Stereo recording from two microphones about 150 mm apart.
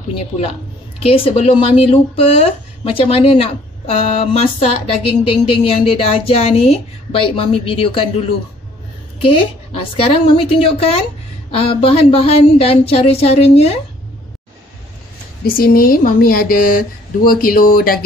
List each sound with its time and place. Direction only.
0.9 s speech: 40° left (ahead or behind)
9.9 s speech: 40° left (ahead or behind)
15.4 s speech: 75° left (ahead or behind)